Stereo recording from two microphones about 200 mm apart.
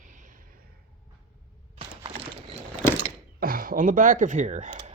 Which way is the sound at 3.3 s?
45° right (ahead or behind).